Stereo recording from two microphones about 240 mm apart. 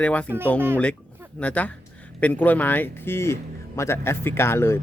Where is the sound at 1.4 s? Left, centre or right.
Centre.